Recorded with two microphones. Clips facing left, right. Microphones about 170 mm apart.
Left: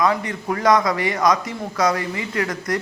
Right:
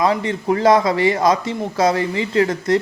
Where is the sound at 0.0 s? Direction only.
30° right (ahead or behind).